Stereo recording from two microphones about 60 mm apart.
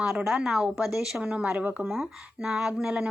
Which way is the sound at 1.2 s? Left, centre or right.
Centre.